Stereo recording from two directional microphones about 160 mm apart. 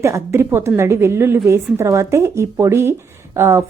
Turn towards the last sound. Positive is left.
turn(degrees=-15)  # may be behind; listen again after turning